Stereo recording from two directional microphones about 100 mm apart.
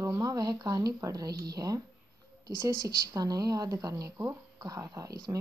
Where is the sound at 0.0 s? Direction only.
30° right (ahead or behind).